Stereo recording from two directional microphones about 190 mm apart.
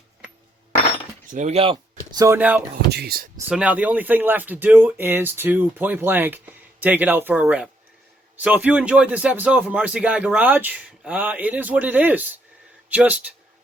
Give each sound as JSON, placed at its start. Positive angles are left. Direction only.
{"t": 1.3, "sound": "speech", "side_deg": -35}
{"t": 2.1, "sound": "speech", "side_deg": -15}
{"t": 2.9, "sound": "speech", "side_deg": -55}
{"t": 3.5, "sound": "speech", "side_deg": -5}